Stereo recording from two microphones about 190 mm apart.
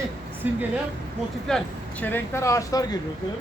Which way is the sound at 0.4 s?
10° right (ahead or behind).